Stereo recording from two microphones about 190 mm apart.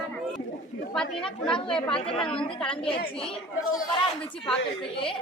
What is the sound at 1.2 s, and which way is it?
Speech, 25° left (ahead or behind).